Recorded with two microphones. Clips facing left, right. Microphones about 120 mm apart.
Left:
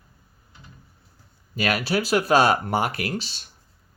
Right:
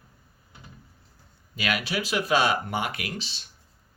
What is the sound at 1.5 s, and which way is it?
Speech, 40° left (ahead or behind).